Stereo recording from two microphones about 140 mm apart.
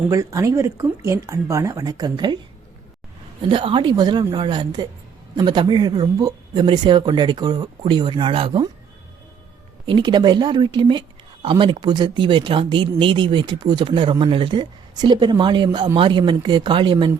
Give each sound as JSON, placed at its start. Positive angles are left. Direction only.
{"t": 0.1, "sound": "speech", "side_deg": -25}
{"t": 3.5, "sound": "speech", "side_deg": -35}
{"t": 9.8, "sound": "speech", "side_deg": -35}